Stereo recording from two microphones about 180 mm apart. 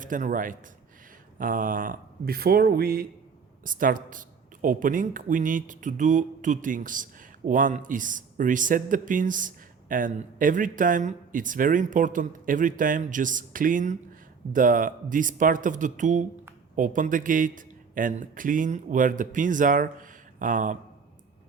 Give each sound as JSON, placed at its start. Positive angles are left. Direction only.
{"t": 0.0, "sound": "speech", "side_deg": -45}